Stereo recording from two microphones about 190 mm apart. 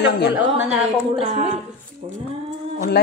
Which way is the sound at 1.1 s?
30° right (ahead or behind).